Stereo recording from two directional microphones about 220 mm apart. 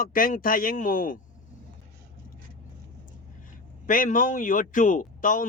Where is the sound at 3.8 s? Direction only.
40° left (ahead or behind).